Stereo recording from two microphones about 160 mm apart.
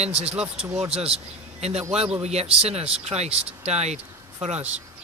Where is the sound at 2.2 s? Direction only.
40° right (ahead or behind).